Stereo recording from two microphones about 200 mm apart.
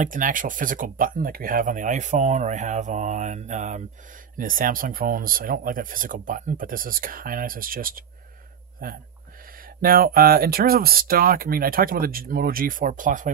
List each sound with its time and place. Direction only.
0.0 s speech: 40° right (ahead or behind)